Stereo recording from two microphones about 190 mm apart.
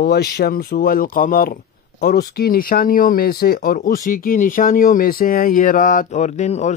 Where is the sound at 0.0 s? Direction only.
60° left (ahead or behind).